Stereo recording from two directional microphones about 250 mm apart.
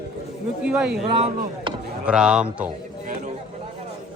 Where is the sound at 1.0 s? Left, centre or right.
Right.